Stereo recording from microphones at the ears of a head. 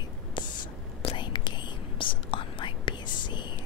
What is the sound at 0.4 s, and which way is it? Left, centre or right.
Whispering, left.